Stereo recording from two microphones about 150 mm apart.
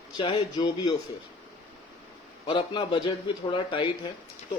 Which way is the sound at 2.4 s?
30° left (ahead or behind).